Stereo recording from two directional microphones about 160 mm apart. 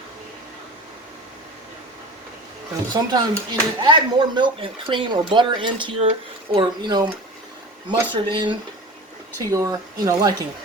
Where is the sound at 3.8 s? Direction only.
30° right (ahead or behind).